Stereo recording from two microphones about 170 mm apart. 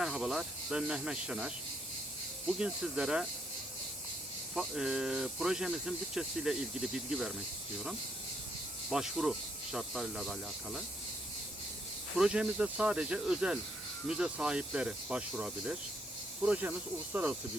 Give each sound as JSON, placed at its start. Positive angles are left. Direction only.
{"t": 0.0, "sound": "speech", "side_deg": 0}
{"t": 4.5, "sound": "speech", "side_deg": -5}
{"t": 8.9, "sound": "speech", "side_deg": -5}
{"t": 12.1, "sound": "speech", "side_deg": -5}